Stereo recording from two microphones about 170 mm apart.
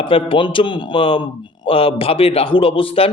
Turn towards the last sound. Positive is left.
turn(degrees=35)  # may be behind; listen again after turning